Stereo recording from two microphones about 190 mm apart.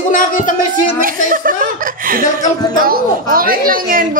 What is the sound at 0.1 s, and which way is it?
Speech, 45° left (ahead or behind).